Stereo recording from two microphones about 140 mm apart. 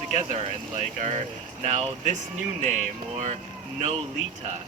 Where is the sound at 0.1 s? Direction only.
55° right (ahead or behind).